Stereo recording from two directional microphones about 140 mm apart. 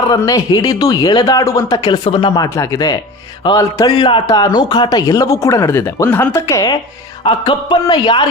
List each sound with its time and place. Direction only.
0.2 s a man's voice: 25° left (ahead or behind)
6.4 s a man's voice: 25° left (ahead or behind)